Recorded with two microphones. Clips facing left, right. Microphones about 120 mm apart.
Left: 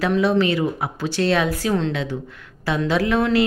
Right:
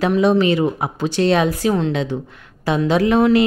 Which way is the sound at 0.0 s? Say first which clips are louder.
Right 3 dB; 20° right (ahead or behind).